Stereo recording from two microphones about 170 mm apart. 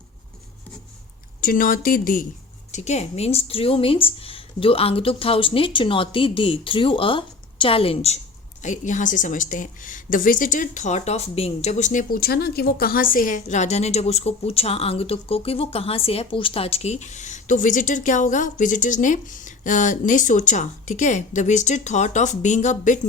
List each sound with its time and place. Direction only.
1.4 s speech: 55° left (ahead or behind)
2.7 s speech: 40° left (ahead or behind)
8.6 s a woman's voice: 45° left (ahead or behind)